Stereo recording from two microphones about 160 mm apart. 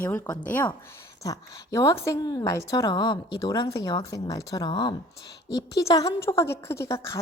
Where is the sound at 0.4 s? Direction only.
10° left (ahead or behind).